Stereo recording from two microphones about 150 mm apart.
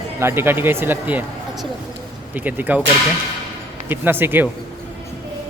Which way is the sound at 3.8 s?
15° right (ahead or behind).